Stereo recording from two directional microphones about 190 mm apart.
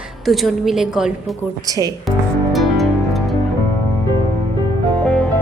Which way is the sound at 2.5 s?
Centre (ahead or behind).